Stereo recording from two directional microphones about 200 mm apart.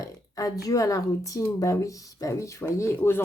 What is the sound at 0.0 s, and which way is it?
Speech, 15° left (ahead or behind).